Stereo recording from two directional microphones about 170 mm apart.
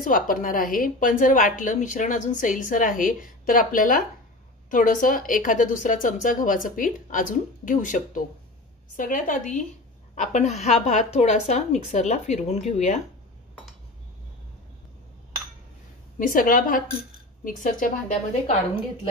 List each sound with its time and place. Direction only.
0.0 s a woman's voice: 50° left (ahead or behind)
16.2 s a woman's voice: 50° left (ahead or behind)